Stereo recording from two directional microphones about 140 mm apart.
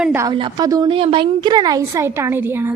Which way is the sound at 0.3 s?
35° right (ahead or behind).